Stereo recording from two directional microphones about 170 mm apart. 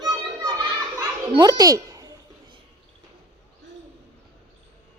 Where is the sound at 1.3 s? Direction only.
25° right (ahead or behind).